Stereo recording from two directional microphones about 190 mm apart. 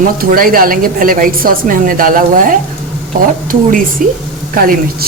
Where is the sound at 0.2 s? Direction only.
50° right (ahead or behind).